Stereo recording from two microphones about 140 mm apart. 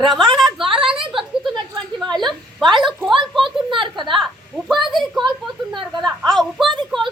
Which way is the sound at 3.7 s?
35° right (ahead or behind).